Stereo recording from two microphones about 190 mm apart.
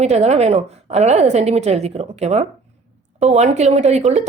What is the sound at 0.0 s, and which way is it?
Speech, 35° right (ahead or behind).